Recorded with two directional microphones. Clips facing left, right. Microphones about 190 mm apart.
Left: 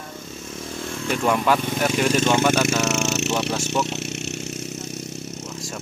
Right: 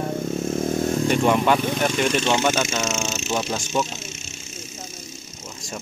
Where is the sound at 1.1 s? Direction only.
Centre (ahead or behind).